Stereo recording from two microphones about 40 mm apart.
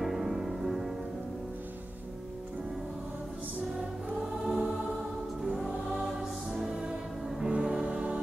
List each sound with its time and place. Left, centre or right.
0.0 s music: centre
4.5 s music: centre
6.0 s music: centre
6.7 s music: centre
7.2 s music: centre